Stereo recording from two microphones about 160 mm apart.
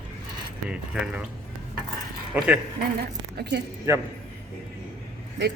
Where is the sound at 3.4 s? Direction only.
90° right.